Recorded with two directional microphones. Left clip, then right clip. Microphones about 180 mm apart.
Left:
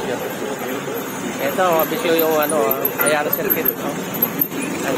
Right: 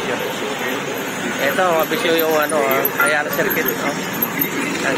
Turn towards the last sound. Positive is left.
turn(degrees=0)  # may be behind; listen again after turning